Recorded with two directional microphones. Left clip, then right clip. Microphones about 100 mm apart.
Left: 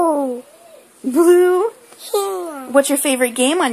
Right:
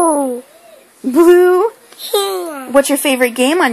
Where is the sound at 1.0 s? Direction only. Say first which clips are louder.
Right 4 dB; 40° right (ahead or behind).